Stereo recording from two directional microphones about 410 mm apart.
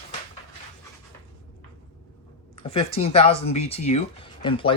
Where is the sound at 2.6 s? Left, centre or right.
Centre.